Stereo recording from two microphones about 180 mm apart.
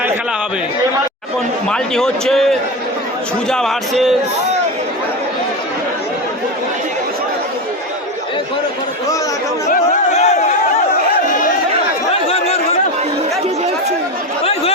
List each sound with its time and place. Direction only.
1.7 s a man's voice: 5° left (ahead or behind)
10.2 s a sound: 40° left (ahead or behind)
12.1 s chatter: 35° left (ahead or behind)